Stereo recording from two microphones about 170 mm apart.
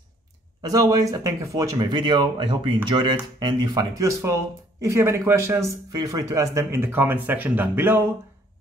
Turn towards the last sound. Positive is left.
turn(degrees=-10)  # may be behind; listen again after turning